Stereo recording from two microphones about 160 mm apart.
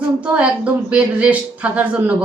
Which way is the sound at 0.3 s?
5° right (ahead or behind).